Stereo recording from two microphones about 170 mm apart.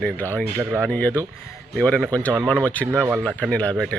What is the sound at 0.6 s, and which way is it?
Speech, 10° right (ahead or behind).